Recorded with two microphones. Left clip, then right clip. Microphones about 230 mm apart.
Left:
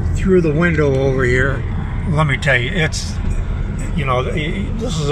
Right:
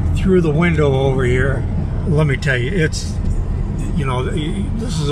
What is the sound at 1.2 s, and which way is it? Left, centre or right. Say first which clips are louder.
Speech: left 2 dB; left.